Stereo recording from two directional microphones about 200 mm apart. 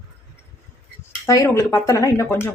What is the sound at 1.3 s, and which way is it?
Speech, 15° left (ahead or behind).